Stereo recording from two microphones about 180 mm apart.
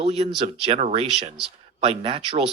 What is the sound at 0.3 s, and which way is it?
Speech, 35° right (ahead or behind).